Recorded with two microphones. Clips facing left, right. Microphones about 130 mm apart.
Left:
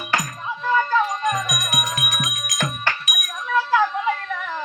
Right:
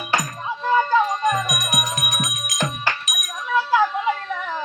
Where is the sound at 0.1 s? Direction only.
25° right (ahead or behind).